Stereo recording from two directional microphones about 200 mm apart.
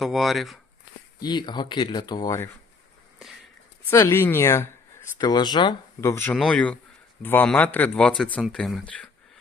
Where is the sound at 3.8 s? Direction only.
15° left (ahead or behind).